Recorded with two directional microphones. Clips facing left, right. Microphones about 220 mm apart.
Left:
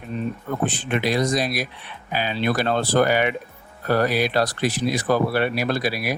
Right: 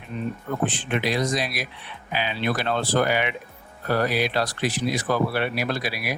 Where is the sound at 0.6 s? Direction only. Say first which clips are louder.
Left 2 dB; 40° left (ahead or behind).